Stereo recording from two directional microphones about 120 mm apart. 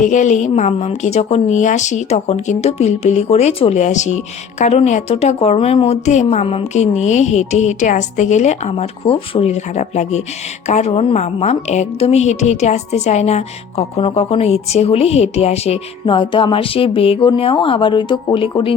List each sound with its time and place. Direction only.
0.0 s a woman's voice: 90° left
8.7 s a woman's voice: 50° left (ahead or behind)
16.0 s speech: 45° left (ahead or behind)